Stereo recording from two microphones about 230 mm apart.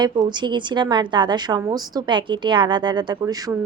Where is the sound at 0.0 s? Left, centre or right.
Centre.